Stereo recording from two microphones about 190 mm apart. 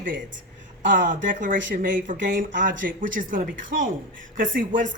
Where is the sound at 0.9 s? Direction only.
45° right (ahead or behind).